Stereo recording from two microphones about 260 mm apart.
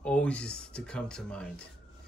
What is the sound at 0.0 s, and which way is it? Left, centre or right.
Speech, centre.